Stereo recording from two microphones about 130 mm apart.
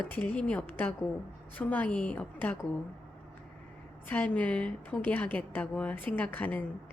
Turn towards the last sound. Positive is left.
turn(degrees=15)  # may be behind; listen again after turning